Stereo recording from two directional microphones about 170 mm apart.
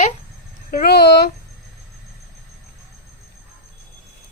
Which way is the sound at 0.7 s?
60° left (ahead or behind).